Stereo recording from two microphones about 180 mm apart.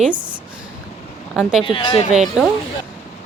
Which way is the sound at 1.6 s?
30° left (ahead or behind).